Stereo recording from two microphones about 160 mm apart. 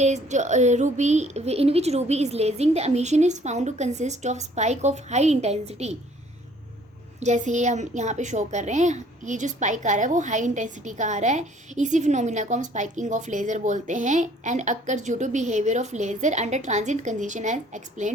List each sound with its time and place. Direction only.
0.0 s a woman's voice: 45° right (ahead or behind)
7.2 s a woman's voice: 45° right (ahead or behind)